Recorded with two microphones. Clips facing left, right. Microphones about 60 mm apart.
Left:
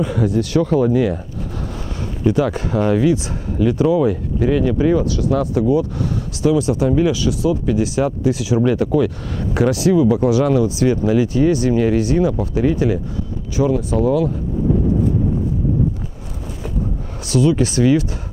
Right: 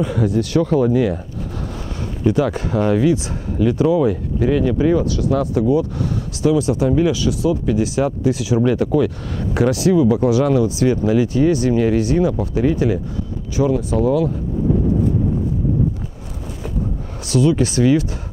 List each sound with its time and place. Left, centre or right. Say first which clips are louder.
0.0 s speech: even; centre
2.2 s speech: even; centre
17.3 s speech: even; centre